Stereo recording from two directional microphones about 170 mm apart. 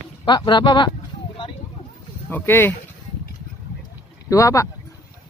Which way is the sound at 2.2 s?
10° left (ahead or behind).